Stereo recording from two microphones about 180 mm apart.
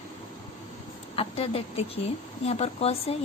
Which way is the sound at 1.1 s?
35° left (ahead or behind).